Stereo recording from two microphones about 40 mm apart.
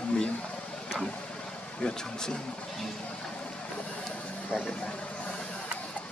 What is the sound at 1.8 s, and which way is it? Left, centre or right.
Speech, centre.